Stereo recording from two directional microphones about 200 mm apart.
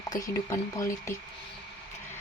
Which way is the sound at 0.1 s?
15° left (ahead or behind).